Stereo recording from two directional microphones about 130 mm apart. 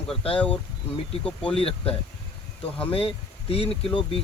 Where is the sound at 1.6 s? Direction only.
50° left (ahead or behind).